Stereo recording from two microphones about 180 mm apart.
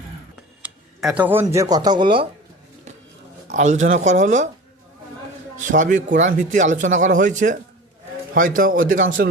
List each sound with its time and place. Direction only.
0.6 s speech: 5° right (ahead or behind); by 2.2 s 25° right (ahead or behind)
3.5 s speech: 40° right (ahead or behind)
5.5 s speech: 45° right (ahead or behind)